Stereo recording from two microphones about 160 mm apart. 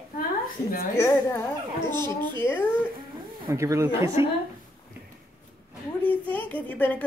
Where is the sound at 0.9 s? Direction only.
15° left (ahead or behind).